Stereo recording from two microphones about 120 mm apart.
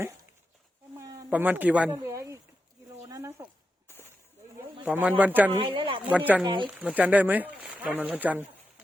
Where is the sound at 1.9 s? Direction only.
25° right (ahead or behind).